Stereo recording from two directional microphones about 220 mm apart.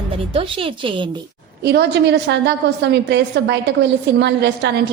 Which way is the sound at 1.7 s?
50° right (ahead or behind).